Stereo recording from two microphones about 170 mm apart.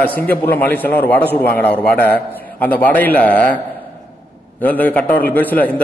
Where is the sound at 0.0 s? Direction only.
10° left (ahead or behind).